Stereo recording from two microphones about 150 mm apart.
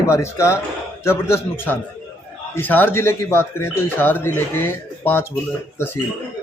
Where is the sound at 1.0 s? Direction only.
15° left (ahead or behind).